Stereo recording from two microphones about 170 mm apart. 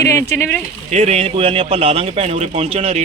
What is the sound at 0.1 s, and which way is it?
Speech, 15° left (ahead or behind).